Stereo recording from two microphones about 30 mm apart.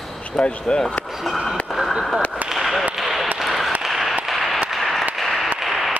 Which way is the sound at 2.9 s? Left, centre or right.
Centre.